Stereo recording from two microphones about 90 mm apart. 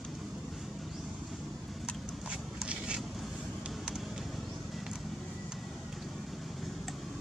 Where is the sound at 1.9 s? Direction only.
10° right (ahead or behind).